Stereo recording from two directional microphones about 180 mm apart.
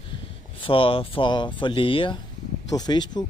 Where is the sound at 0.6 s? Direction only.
30° left (ahead or behind).